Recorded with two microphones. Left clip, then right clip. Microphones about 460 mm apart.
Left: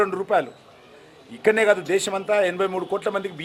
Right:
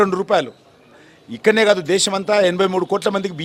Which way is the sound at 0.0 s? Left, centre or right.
Right.